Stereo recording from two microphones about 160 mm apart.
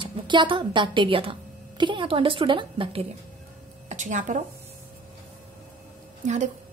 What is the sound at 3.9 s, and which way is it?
Speech, 50° right (ahead or behind).